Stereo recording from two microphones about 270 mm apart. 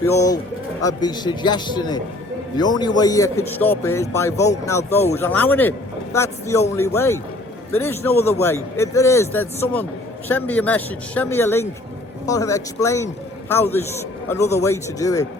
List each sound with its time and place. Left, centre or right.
0.1 s speech: centre